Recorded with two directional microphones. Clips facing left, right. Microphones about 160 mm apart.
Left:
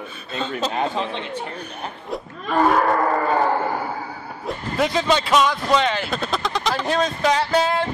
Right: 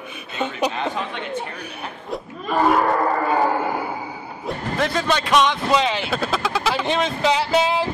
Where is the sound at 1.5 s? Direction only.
5° right (ahead or behind).